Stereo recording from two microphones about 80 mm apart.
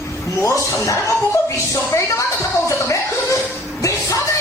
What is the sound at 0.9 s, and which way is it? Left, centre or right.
Speech, left.